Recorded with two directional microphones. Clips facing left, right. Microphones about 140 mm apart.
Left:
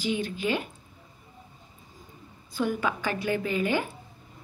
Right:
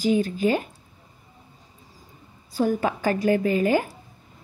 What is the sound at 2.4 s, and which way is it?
A woman's voice, 40° right (ahead or behind).